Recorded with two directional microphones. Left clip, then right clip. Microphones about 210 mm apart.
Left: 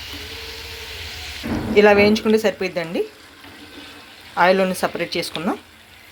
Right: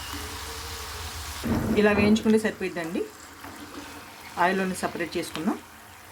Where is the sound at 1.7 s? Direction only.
15° left (ahead or behind).